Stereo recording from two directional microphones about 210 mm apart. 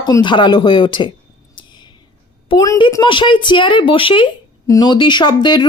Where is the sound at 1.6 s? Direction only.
20° left (ahead or behind).